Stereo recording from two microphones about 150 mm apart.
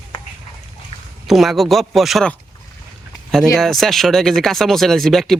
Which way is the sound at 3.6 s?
Centre (ahead or behind).